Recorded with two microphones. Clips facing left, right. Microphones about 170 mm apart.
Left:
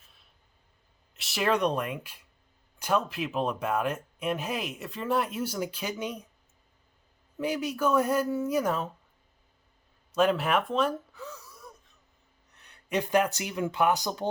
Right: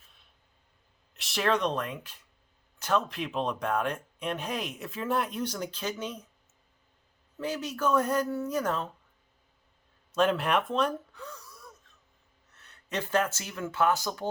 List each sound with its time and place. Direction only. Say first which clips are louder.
1.1 s speech: left 1 dB; centre (ahead or behind)
7.3 s speech: left 3 dB; 10° left (ahead or behind)
10.1 s speech: left 1 dB; 5° left (ahead or behind)